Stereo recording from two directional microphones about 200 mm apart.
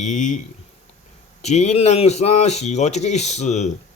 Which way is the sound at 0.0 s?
40° left (ahead or behind).